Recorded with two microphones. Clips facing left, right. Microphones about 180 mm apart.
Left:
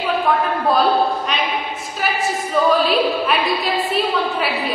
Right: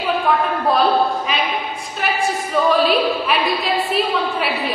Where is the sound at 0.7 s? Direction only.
Centre (ahead or behind).